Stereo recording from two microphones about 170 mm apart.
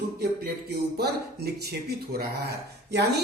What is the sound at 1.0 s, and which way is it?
Speech, 70° right (ahead or behind).